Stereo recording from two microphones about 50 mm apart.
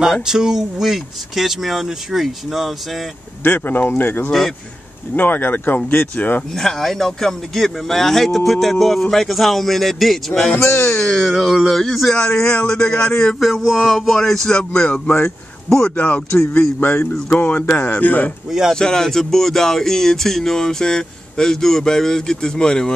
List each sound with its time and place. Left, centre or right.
0.0 s speech: centre
3.4 s speech: left
4.3 s speech: centre
5.1 s speech: left
6.5 s speech: centre
10.6 s speech: left
10.9 s speech: centre
11.2 s speech: centre
12.2 s speech: centre
13.4 s speech: centre
16.0 s speech: left
16.8 s speech: left
18.7 s speech: centre